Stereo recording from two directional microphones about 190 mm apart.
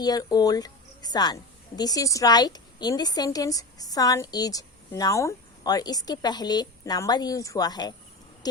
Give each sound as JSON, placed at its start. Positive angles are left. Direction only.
{"t": 0.0, "sound": "a woman's voice", "side_deg": 20}